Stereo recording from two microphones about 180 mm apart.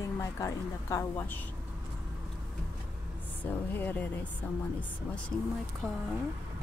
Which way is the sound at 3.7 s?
10° left (ahead or behind).